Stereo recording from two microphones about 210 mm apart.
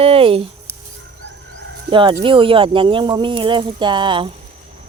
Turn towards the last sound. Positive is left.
turn(degrees=-20)  # may be behind; listen again after turning